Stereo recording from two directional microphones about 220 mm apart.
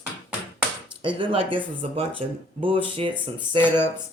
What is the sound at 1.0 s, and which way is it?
Speech, 25° right (ahead or behind).